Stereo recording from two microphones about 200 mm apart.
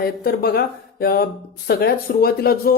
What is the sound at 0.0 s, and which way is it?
Speech, 50° left (ahead or behind).